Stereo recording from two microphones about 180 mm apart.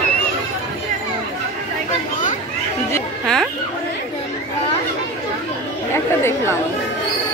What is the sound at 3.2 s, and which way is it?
Speech, 5° left (ahead or behind).